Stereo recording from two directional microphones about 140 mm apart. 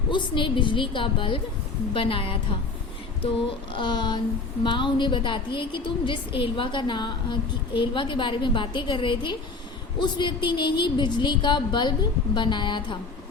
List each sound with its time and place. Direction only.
0.1 s a woman's voice: 35° left (ahead or behind)
3.8 s a woman's voice: 35° left (ahead or behind)